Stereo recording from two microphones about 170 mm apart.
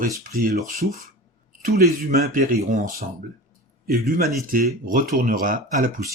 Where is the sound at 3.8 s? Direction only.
60° right (ahead or behind).